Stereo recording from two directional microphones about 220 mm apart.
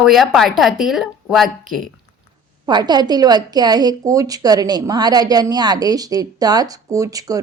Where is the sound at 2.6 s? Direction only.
20° right (ahead or behind).